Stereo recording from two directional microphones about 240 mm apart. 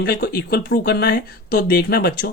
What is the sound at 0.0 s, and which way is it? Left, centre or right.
Speech, left.